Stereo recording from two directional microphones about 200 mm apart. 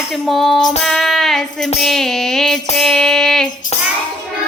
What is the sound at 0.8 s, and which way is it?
Music, centre (ahead or behind).